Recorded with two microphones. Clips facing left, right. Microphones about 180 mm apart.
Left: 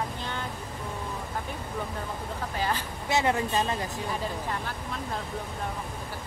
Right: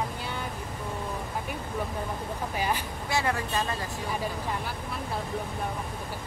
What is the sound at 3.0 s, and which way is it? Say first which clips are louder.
Speech: left 4 dB; 20° left (ahead or behind).